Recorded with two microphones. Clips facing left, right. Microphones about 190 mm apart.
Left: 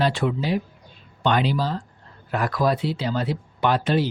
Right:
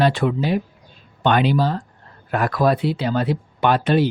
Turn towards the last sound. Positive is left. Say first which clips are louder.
# right 4 dB
turn(degrees=-60)  # may be behind; listen again after turning